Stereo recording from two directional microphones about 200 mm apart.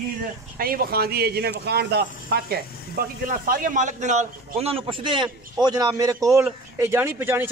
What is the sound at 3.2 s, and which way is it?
A man's voice, 45° right (ahead or behind).